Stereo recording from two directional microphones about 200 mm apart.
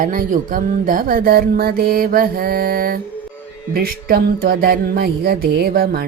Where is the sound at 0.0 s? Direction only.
45° right (ahead or behind).